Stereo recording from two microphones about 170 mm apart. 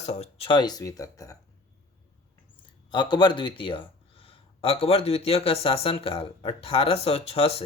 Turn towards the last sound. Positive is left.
turn(degrees=35)  # may be behind; listen again after turning